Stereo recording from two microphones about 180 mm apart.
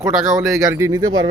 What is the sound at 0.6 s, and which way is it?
Speech, 15° right (ahead or behind).